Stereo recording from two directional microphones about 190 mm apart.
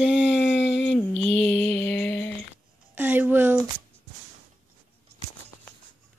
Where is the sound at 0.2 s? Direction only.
65° left (ahead or behind).